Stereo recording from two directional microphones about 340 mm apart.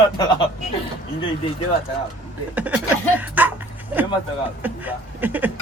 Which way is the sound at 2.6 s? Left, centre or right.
Centre.